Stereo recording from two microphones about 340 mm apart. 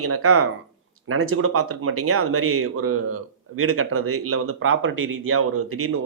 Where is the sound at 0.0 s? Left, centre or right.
Right.